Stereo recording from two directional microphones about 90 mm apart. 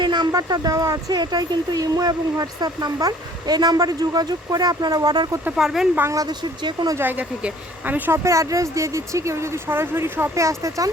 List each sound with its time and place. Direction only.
0.0 s a sound: 55° right (ahead or behind)
0.3 s speech: 45° right (ahead or behind)
5.5 s speech: 5° right (ahead or behind)
6.1 s speech: 40° right (ahead or behind)
6.6 s speech: 55° right (ahead or behind)
6.9 s speech: 20° right (ahead or behind)
8.2 s speech: 35° right (ahead or behind)